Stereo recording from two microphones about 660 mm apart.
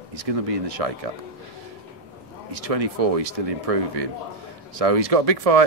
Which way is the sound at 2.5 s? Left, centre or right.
Right.